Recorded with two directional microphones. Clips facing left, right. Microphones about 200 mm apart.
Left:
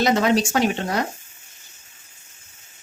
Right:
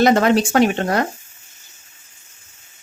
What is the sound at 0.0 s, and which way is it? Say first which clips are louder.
Speech: right 4 dB; 55° right (ahead or behind).